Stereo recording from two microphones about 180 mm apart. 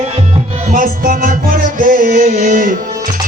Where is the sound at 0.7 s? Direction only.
45° right (ahead or behind).